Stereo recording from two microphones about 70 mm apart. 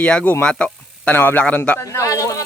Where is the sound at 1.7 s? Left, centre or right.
Left.